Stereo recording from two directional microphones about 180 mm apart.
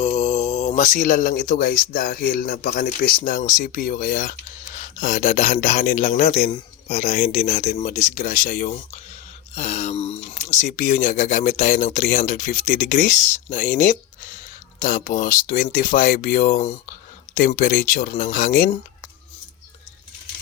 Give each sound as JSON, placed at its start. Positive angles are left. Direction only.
{"t": 0.0, "sound": "a man's voice", "side_deg": 35}